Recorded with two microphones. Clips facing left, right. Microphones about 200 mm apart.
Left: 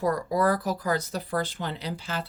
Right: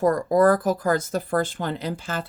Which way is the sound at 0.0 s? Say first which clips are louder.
Right 6 dB; 50° right (ahead or behind).